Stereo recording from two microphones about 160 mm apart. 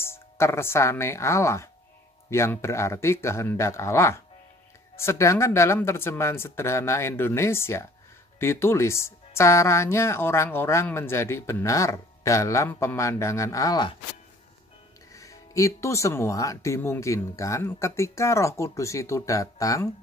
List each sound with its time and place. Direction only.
0.0 s speech: 15° left (ahead or behind)
15.1 s speech: 20° left (ahead or behind)